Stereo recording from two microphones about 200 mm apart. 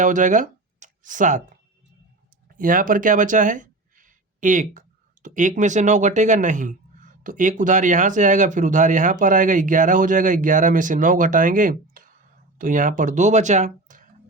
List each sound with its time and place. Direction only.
0.0 s speech: 40° right (ahead or behind)
2.5 s speech: 45° right (ahead or behind)